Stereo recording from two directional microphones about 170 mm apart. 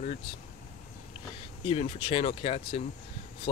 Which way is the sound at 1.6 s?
30° left (ahead or behind).